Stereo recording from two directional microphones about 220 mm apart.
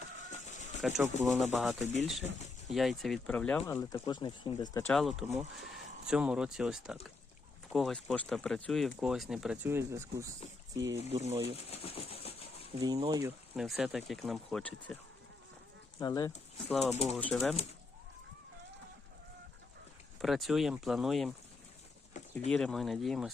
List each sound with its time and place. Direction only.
0.9 s speech: 10° right (ahead or behind)
1.2 s speech: centre (ahead or behind); by 4.9 s 15° left (ahead or behind)
4.9 s speech: centre (ahead or behind)
10.8 s speech: 55° right (ahead or behind)
11.1 s speech: 25° right (ahead or behind)
11.5 s speech: 25° left (ahead or behind)
12.8 s speech: 20° right (ahead or behind)
13.6 s speech: centre (ahead or behind)
16.0 s speech: 15° left (ahead or behind)
16.6 s speech: centre (ahead or behind)
20.2 s speech: centre (ahead or behind)
22.4 s speech: centre (ahead or behind)